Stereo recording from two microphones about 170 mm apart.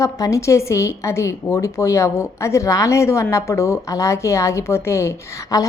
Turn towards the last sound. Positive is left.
turn(degrees=20)  # may be behind; listen again after turning